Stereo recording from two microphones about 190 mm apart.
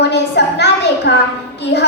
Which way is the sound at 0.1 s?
65° left (ahead or behind).